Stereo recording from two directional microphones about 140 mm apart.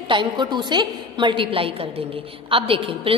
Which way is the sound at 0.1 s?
35° right (ahead or behind).